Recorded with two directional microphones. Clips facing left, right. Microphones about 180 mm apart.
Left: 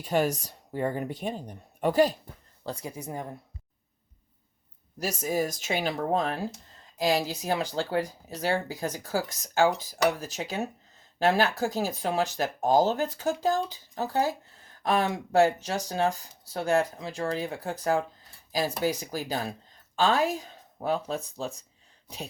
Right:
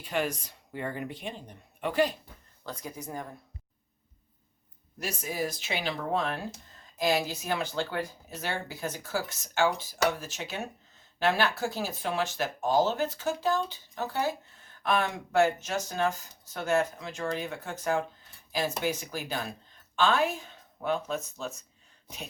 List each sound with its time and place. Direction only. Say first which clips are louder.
0.0 s speech: left 5 dB; 40° left (ahead or behind); by 3.3 s 25° left (ahead or behind)
4.9 s speech: left 5 dB; 40° left (ahead or behind)